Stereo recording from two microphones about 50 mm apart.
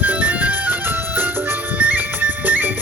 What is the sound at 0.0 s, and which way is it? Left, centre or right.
Music, right.